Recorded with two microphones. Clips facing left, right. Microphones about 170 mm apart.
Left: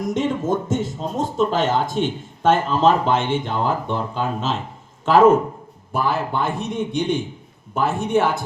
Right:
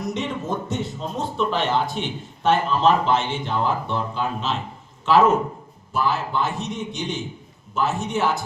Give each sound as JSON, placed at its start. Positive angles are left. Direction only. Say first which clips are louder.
{"t": 0.0, "sound": "a man's voice", "louder": "left 5 dB", "side_deg": 45}